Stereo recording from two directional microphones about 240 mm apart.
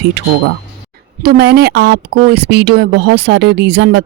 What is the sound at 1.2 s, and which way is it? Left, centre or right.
Speech, right.